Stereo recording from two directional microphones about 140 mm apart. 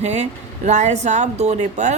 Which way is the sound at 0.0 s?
55° right (ahead or behind).